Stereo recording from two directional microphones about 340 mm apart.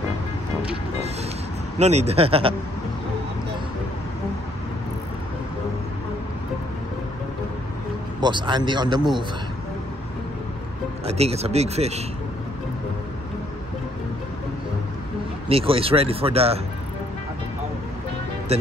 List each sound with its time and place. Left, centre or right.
1.8 s speech: centre
8.2 s speech: centre
11.1 s speech: centre
15.4 s speech: centre
18.5 s speech: centre